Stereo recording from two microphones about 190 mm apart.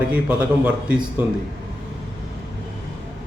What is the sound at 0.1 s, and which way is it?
Speech, 5° right (ahead or behind).